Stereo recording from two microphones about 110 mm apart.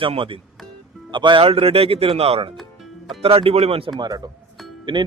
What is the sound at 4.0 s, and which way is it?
Speech, 35° right (ahead or behind).